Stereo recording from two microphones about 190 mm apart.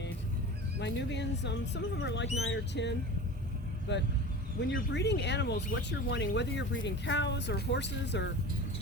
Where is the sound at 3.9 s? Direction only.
65° left (ahead or behind).